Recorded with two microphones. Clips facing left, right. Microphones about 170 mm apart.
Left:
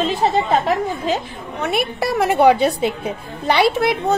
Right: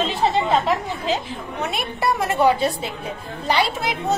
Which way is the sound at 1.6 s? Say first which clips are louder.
Left 5 dB; 65° left (ahead or behind).